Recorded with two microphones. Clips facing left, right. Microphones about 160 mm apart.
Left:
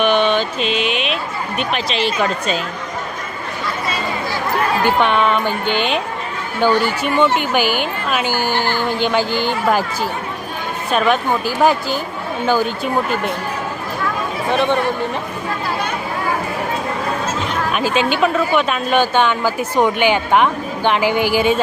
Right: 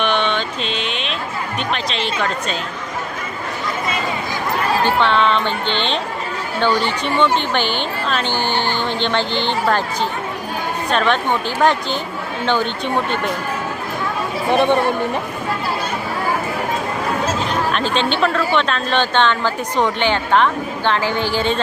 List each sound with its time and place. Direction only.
0.0 s mantra: 5° left (ahead or behind)
1.5 s speech: 5° left (ahead or behind)
4.9 s speech: 15° left (ahead or behind)
14.5 s speech: 15° right (ahead or behind)
17.7 s speech: 10° left (ahead or behind)